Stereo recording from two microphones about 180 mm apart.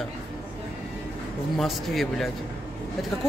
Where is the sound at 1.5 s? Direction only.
Centre (ahead or behind).